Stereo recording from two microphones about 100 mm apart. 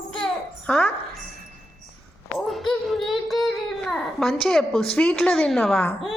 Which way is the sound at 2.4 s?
Centre (ahead or behind).